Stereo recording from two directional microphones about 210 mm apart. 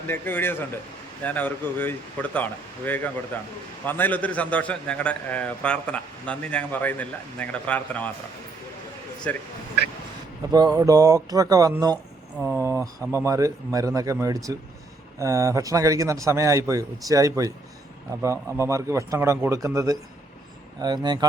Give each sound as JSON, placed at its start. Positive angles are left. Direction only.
{"t": 0.1, "sound": "a man's voice", "side_deg": 10}
{"t": 9.3, "sound": "a man's voice", "side_deg": 5}
{"t": 10.5, "sound": "a man's voice", "side_deg": -20}